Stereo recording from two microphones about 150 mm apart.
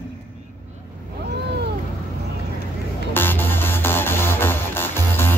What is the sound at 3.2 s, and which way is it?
Music, 15° left (ahead or behind).